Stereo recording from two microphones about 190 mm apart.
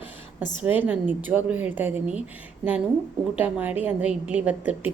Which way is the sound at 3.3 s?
10° right (ahead or behind).